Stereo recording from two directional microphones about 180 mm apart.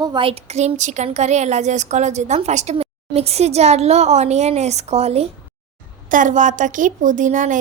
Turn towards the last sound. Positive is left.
turn(degrees=-45)  # may be behind; listen again after turning